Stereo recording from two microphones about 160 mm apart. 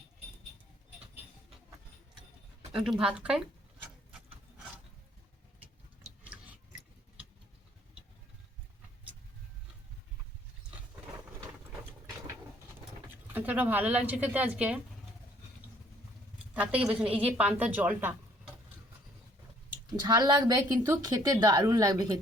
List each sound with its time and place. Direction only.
3.0 s speech: 5° right (ahead or behind)
13.3 s speech: 10° right (ahead or behind)
16.6 s a woman's voice: 10° right (ahead or behind)
19.9 s a woman's voice: 25° right (ahead or behind)